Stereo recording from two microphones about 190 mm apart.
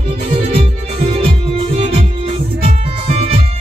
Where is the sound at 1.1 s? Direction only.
30° right (ahead or behind).